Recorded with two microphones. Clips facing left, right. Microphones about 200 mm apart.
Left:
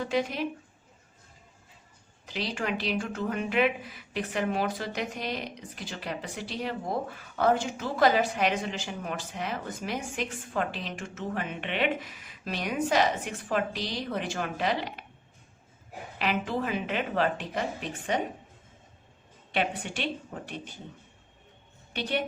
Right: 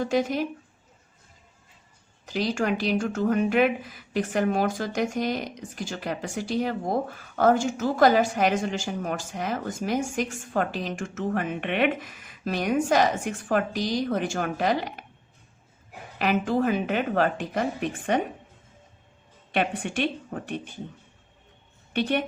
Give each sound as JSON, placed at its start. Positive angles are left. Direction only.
{"t": 0.0, "sound": "speech", "side_deg": -45}
{"t": 2.2, "sound": "speech", "side_deg": -45}
{"t": 16.1, "sound": "speech", "side_deg": -45}
{"t": 19.5, "sound": "speech", "side_deg": -50}